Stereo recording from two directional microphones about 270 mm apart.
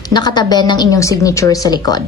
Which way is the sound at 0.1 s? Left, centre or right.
Centre.